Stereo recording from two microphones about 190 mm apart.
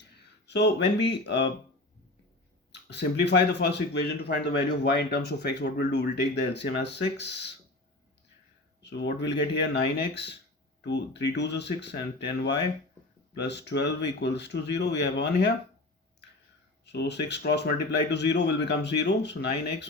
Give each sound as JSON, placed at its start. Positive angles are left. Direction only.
{"t": 0.4, "sound": "speech", "side_deg": 60}
{"t": 2.9, "sound": "speech", "side_deg": 60}
{"t": 8.8, "sound": "speech", "side_deg": 65}
{"t": 16.8, "sound": "speech", "side_deg": 60}